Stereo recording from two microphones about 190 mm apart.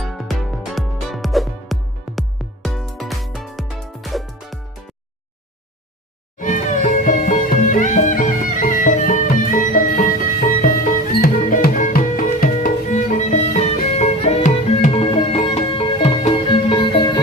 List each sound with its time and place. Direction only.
0.0 s music: centre (ahead or behind)
6.4 s music: 45° left (ahead or behind); by 17.2 s 25° left (ahead or behind)